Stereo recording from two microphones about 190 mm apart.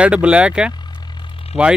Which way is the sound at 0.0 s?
5° right (ahead or behind).